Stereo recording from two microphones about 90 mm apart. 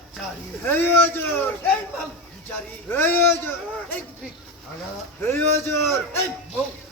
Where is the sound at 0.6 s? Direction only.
25° left (ahead or behind).